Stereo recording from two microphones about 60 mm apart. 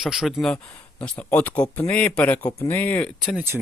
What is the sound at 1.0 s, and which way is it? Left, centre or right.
A man's voice, left.